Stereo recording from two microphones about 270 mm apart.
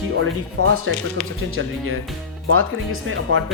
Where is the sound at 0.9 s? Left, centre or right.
Right.